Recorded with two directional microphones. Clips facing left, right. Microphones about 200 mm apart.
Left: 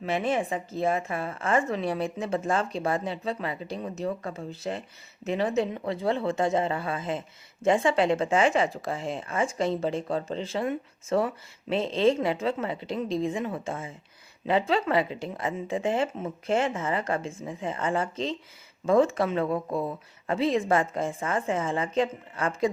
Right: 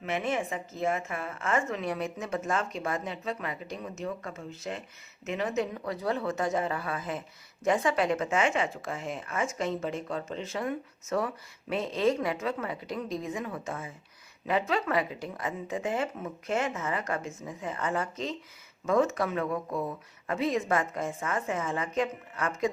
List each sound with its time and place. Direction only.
0.0 s a woman's voice: 30° left (ahead or behind)